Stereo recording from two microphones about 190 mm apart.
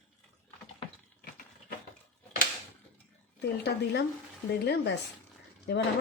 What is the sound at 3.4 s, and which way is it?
Speech, 60° left (ahead or behind).